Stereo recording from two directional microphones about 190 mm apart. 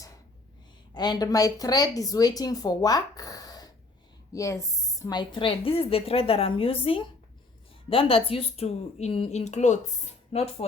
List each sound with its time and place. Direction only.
0.9 s a woman's voice: 20° left (ahead or behind)